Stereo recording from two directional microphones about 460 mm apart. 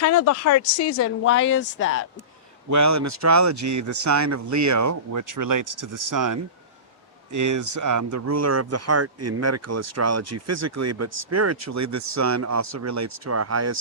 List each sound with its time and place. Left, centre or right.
0.0 s a woman's voice: left
2.6 s speech: right